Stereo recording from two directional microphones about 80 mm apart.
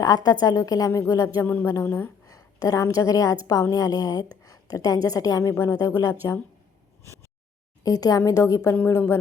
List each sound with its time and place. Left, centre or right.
0.0 s a woman's voice: left
7.0 s a sound: right
7.9 s a woman's voice: left
8.9 s speech: left